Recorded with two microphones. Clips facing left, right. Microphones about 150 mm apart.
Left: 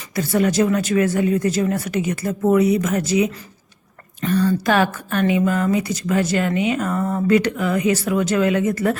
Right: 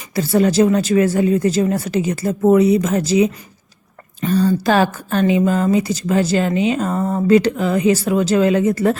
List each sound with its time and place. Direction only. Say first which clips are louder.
0.2 s a woman's voice: right 4 dB; 30° right (ahead or behind)
4.3 s a woman's voice: right 2 dB; 30° right (ahead or behind)